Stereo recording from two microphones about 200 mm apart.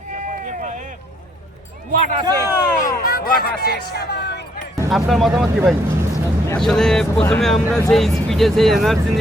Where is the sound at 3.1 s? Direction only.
50° left (ahead or behind).